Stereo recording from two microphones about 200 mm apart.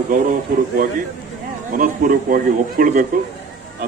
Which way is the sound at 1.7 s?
45° right (ahead or behind).